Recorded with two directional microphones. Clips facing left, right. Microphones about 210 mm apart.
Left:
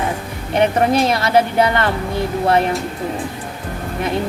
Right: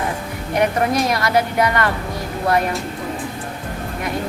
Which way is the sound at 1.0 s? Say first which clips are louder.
Left 3 dB; 25° left (ahead or behind).